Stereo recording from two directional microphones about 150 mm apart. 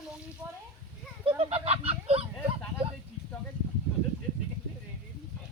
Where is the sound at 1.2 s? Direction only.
35° right (ahead or behind).